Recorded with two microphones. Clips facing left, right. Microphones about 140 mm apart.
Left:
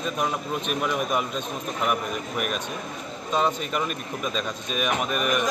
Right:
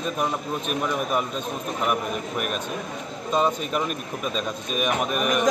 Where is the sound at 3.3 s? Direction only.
5° right (ahead or behind).